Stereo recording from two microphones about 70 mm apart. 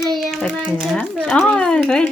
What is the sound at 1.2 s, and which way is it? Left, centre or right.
Speech, centre.